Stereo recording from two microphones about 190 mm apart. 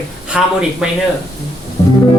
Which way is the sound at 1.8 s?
20° left (ahead or behind).